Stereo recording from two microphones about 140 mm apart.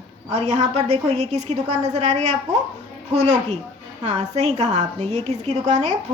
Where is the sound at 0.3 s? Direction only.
50° right (ahead or behind).